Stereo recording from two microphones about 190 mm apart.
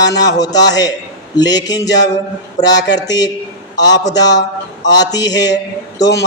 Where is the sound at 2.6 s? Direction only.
40° left (ahead or behind).